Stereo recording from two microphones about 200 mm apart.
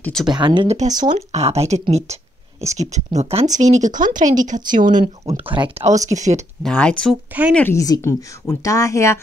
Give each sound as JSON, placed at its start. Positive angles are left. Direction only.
{"t": 0.0, "sound": "speech", "side_deg": 5}
{"t": 0.3, "sound": "speech", "side_deg": -20}
{"t": 0.7, "sound": "speech", "side_deg": -40}
{"t": 5.0, "sound": "speech", "side_deg": -30}
{"t": 6.6, "sound": "speech", "side_deg": 5}